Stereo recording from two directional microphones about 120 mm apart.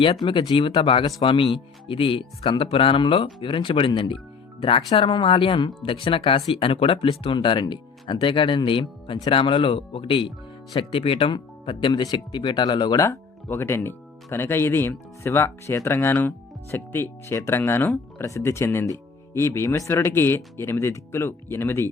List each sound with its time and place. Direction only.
0.0 s speech: 45° left (ahead or behind)
13.0 s speech: 20° left (ahead or behind)